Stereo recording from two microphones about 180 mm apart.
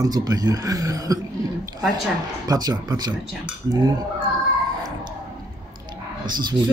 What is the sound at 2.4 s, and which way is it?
Speech, 20° right (ahead or behind).